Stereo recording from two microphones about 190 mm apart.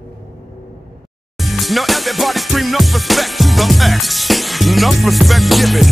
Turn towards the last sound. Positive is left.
turn(degrees=0)  # may be behind; listen again after turning